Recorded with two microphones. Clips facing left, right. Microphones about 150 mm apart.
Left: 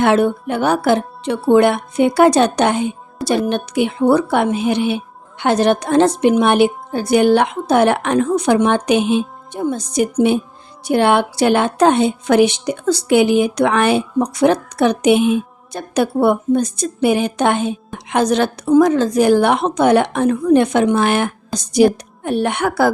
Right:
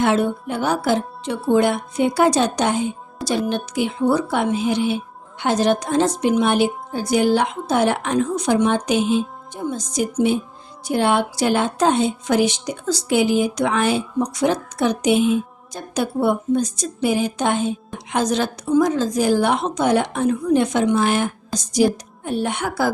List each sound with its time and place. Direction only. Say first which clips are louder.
0.0 s a woman's voice: left 4 dB; 65° left (ahead or behind)